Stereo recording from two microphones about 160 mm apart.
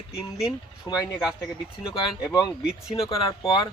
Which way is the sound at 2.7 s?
5° right (ahead or behind).